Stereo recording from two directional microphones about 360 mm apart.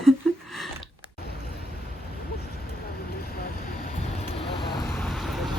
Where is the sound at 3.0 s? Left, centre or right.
Left.